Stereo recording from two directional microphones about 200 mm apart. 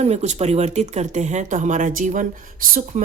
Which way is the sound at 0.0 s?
35° right (ahead or behind).